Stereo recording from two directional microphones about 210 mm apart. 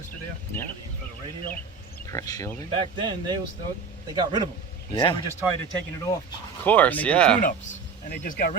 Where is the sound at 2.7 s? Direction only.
20° right (ahead or behind).